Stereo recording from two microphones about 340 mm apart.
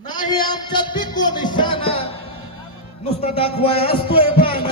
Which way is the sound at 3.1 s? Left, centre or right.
Centre.